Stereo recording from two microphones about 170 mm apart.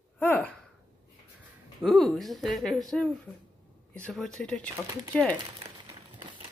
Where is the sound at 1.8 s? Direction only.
Centre (ahead or behind).